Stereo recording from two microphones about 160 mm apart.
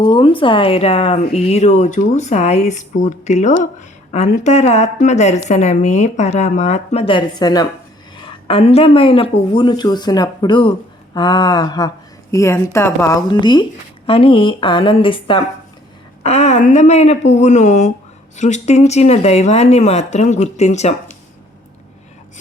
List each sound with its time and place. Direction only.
0.0 s a woman's voice: 30° left (ahead or behind)
8.1 s a woman's voice: 35° left (ahead or behind)
16.2 s speech: 45° left (ahead or behind)